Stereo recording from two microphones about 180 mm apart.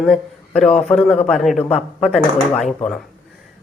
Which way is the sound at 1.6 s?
35° left (ahead or behind).